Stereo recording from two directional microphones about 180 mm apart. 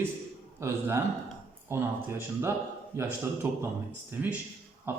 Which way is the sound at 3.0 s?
15° right (ahead or behind).